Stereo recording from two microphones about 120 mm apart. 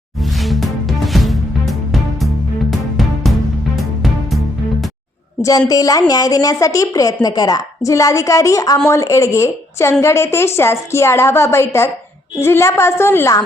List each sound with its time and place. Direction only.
0.2 s music: centre (ahead or behind)
5.4 s a woman's voice: 30° left (ahead or behind)